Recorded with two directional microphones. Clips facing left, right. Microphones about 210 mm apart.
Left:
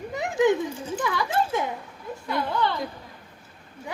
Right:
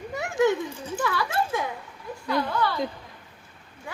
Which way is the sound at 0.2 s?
15° left (ahead or behind).